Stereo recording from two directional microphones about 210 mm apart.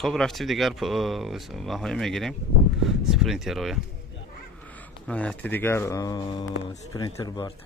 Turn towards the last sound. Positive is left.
turn(degrees=20)  # may be behind; listen again after turning